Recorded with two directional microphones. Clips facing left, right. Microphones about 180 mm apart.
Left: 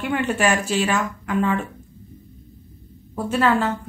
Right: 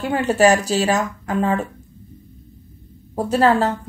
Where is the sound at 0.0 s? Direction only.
35° right (ahead or behind).